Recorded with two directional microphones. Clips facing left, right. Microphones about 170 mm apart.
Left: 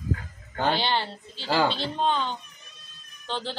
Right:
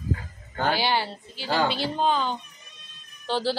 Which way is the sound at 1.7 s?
5° right (ahead or behind).